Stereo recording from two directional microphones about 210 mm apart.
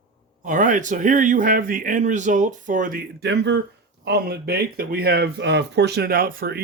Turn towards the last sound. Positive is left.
turn(degrees=-45)  # may be behind; listen again after turning